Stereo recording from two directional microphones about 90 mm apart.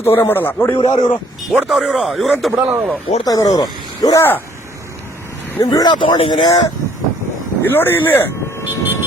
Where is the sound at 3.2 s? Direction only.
45° left (ahead or behind).